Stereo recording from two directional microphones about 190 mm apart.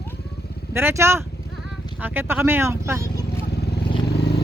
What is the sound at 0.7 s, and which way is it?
Speech, 10° right (ahead or behind).